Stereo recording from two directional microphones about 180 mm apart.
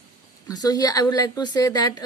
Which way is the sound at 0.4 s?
20° left (ahead or behind).